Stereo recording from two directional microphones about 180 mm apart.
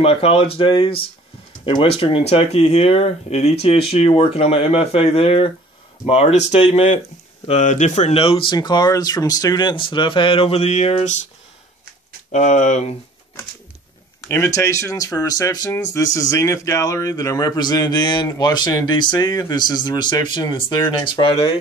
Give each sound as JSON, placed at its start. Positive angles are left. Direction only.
{"t": 0.0, "sound": "speech", "side_deg": 30}
{"t": 12.3, "sound": "speech", "side_deg": 40}
{"t": 14.3, "sound": "speech", "side_deg": 15}